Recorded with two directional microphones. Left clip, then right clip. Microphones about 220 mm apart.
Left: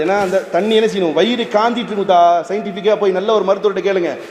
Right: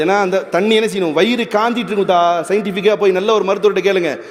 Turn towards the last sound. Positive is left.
turn(degrees=-55)  # may be behind; listen again after turning